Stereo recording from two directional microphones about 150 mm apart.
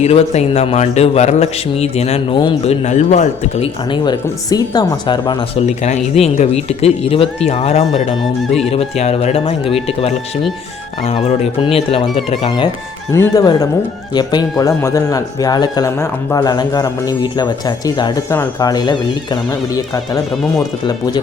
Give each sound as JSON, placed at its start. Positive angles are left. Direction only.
{"t": 0.0, "sound": "a man's voice", "side_deg": 45}
{"t": 2.8, "sound": "a man's voice", "side_deg": 50}
{"t": 3.9, "sound": "speech", "side_deg": 30}
{"t": 5.5, "sound": "a man's voice", "side_deg": 45}
{"t": 13.1, "sound": "speech", "side_deg": 25}